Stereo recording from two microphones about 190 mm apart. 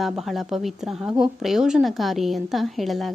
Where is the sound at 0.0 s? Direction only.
Centre (ahead or behind).